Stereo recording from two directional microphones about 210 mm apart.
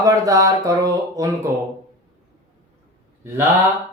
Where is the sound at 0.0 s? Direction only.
15° right (ahead or behind).